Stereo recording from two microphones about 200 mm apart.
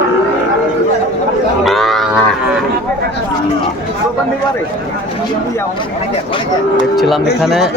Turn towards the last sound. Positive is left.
turn(degrees=0)  # may be behind; listen again after turning